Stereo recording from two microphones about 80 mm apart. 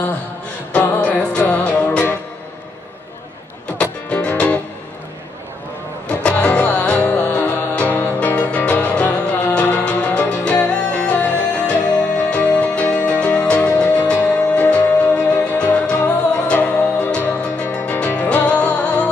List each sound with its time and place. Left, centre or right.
0.7 s music: left
3.7 s music: centre
6.2 s music: centre